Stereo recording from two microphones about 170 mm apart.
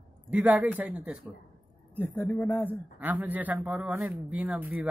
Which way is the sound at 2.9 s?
10° right (ahead or behind).